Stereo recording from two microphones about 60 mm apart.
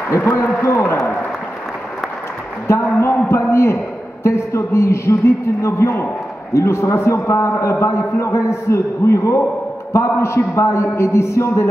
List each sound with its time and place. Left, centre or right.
0.2 s a man's voice: left
2.8 s a man's voice: left